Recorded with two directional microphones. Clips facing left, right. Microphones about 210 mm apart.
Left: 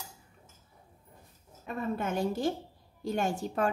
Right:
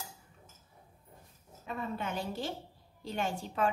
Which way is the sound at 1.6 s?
50° left (ahead or behind).